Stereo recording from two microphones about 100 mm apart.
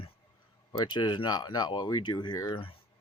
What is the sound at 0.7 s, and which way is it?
Speech, 45° left (ahead or behind).